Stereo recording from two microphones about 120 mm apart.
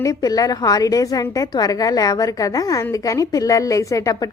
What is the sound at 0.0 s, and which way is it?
A woman's voice, 30° left (ahead or behind).